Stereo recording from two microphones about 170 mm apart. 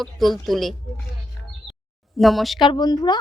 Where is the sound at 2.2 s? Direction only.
Centre (ahead or behind).